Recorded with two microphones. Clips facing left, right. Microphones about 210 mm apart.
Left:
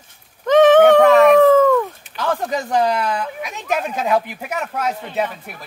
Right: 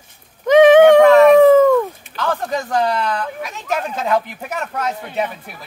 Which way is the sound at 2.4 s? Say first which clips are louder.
Left 1 dB; 10° left (ahead or behind).